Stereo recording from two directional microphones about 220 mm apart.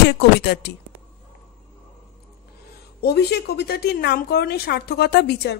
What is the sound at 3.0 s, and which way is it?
A woman's voice, 45° left (ahead or behind).